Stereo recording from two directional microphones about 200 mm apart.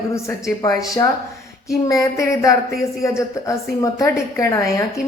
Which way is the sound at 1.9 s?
15° left (ahead or behind).